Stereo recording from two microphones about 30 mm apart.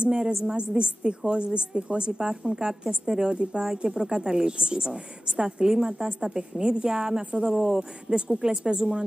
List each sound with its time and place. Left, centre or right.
0.0 s a woman's voice: right
0.6 s a woman's voice: right; by 6.0 s centre
6.0 s a woman's voice: right